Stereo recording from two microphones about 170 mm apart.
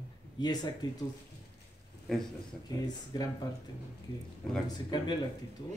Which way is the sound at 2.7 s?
20° left (ahead or behind).